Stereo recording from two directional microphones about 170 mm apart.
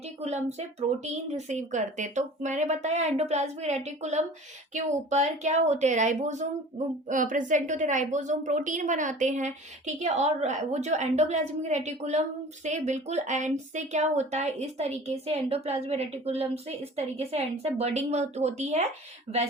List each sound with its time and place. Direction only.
0.2 s a woman's voice: 40° right (ahead or behind)